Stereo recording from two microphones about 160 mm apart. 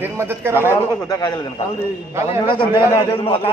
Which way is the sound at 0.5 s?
20° left (ahead or behind).